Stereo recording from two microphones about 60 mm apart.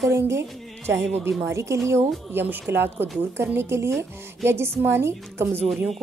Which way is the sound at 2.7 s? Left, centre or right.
Right.